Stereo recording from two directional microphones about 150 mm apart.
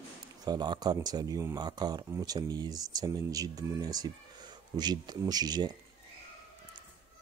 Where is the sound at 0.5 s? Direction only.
30° right (ahead or behind).